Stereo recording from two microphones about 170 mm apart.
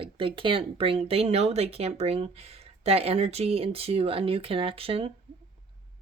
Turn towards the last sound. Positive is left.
turn(degrees=-35)  # may be behind; listen again after turning